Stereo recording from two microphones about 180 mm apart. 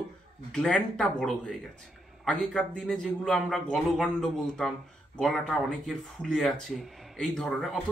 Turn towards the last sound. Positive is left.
turn(degrees=0)  # may be behind; listen again after turning